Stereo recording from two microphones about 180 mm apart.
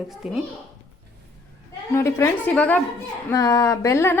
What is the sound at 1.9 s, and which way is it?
A woman's voice, 15° left (ahead or behind).